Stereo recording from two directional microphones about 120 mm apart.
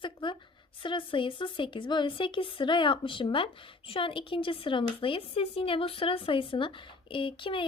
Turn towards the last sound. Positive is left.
turn(degrees=45)  # may be behind; listen again after turning